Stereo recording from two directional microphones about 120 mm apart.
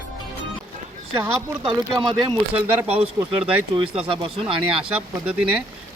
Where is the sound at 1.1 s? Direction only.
15° right (ahead or behind).